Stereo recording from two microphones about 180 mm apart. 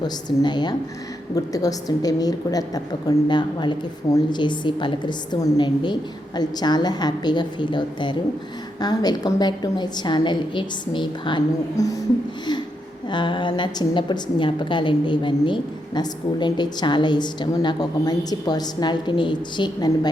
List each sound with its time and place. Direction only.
0.0 s a woman's voice: 25° left (ahead or behind)
13.1 s a woman's voice: 25° left (ahead or behind)